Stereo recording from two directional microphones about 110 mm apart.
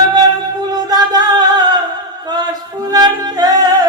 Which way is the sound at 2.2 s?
40° right (ahead or behind).